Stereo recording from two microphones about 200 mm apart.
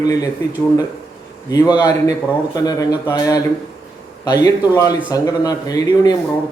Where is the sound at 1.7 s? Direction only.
20° left (ahead or behind).